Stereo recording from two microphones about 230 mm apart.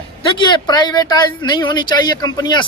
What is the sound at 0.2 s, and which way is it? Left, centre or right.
Speech, left.